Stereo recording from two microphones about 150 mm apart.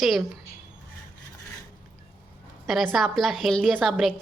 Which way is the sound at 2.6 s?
Centre (ahead or behind).